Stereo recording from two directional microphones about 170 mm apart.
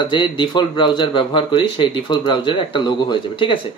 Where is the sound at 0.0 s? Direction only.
30° left (ahead or behind).